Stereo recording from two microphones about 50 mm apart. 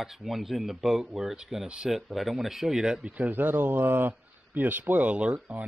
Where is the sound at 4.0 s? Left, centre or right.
Right.